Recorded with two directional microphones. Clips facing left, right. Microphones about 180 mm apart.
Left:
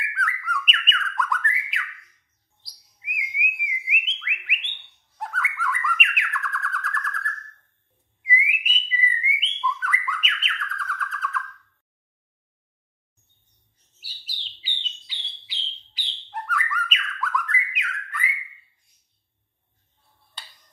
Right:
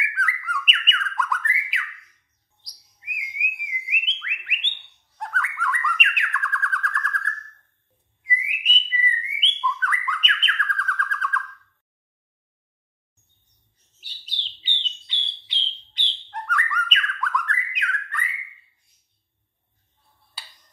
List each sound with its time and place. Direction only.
0.0 s bird: centre (ahead or behind)
8.5 s whistling: 5° left (ahead or behind)
9.3 s bird: 5° left (ahead or behind)
14.0 s bird: 5° left (ahead or behind)
20.4 s a sound: 5° right (ahead or behind)